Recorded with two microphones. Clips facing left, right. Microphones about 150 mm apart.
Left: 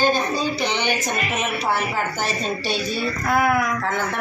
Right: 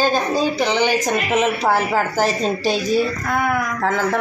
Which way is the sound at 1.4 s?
90° right.